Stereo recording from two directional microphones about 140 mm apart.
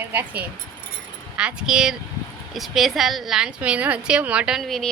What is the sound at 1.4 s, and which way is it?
A woman's voice, 5° right (ahead or behind).